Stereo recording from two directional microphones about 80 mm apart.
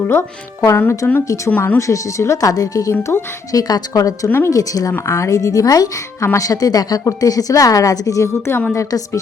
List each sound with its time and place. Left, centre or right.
0.1 s speech: left
1.9 s a woman's voice: left
2.9 s speech: left
3.5 s a woman's voice: left
4.3 s speech: left
4.5 s a woman's voice: left